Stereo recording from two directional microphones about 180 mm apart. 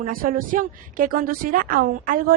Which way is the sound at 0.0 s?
50° right (ahead or behind).